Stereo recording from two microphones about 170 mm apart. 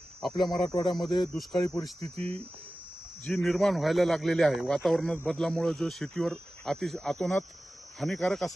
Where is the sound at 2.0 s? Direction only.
35° right (ahead or behind).